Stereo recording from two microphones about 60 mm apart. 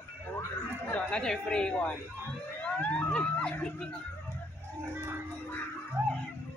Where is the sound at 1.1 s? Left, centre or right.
Centre.